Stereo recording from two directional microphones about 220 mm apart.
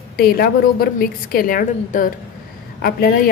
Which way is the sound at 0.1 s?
45° left (ahead or behind).